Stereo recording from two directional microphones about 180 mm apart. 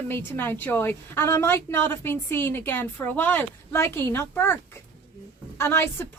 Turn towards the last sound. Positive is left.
turn(degrees=15)  # may be behind; listen again after turning